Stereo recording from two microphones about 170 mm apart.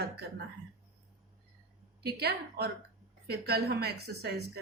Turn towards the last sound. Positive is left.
turn(degrees=-70)  # may be behind; listen again after turning